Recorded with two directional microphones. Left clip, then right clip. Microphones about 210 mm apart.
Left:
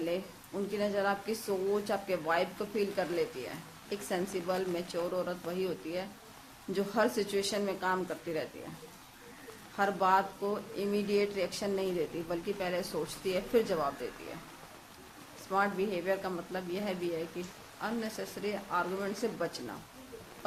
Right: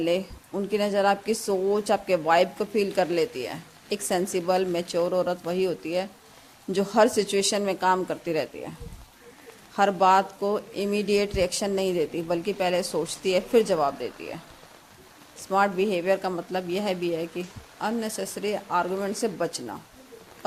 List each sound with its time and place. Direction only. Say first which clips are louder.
0.0 s speech: right 10 dB; 40° right (ahead or behind)
9.7 s speech: right 8 dB; 40° right (ahead or behind)
15.5 s speech: right 8 dB; 40° right (ahead or behind)